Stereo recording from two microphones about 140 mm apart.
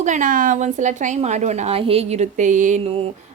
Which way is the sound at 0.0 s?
65° right (ahead or behind).